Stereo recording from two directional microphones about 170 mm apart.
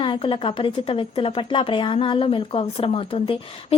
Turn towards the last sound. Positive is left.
turn(degrees=35)  # may be behind; listen again after turning